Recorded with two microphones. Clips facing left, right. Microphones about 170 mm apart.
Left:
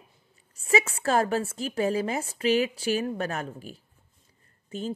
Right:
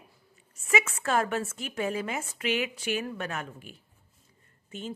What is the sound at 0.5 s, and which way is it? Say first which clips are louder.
Speech: left 3 dB; 30° left (ahead or behind).